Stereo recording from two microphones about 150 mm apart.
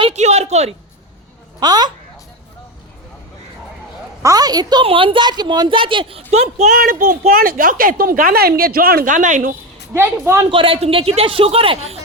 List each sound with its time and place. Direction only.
0.0 s a woman's voice: 50° right (ahead or behind)
1.5 s speech: 25° right (ahead or behind)
4.2 s a woman's voice: 25° right (ahead or behind); by 6.7 s 45° right (ahead or behind)
6.7 s a child's voice: 70° right (ahead or behind)
9.9 s a woman's voice: 15° right (ahead or behind)
10.5 s a woman's voice: 35° right (ahead or behind)